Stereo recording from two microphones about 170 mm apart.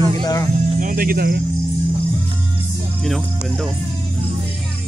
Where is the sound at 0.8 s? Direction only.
55° right (ahead or behind).